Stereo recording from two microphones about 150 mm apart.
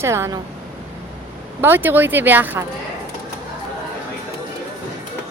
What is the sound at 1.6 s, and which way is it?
A woman's voice, 15° right (ahead or behind).